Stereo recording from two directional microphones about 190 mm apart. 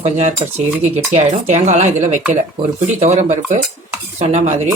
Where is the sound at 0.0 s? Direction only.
35° right (ahead or behind).